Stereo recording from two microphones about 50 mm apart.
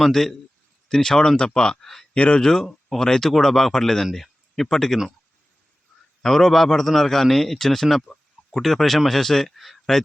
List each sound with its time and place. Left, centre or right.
0.0 s speech: centre
2.1 s speech: left
6.2 s a man's voice: centre